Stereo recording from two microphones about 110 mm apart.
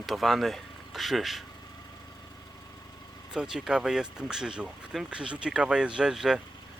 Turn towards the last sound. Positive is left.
turn(degrees=-5)  # may be behind; listen again after turning